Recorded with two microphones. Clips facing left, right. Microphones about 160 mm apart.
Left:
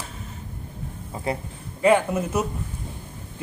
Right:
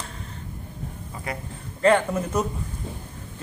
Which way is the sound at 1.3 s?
30° left (ahead or behind).